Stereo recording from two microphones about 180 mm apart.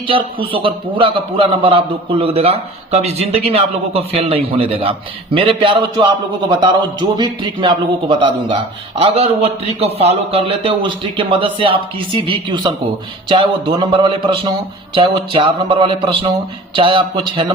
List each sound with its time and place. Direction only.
0.1 s speech: 30° right (ahead or behind)
7.2 s a man's voice: 25° right (ahead or behind)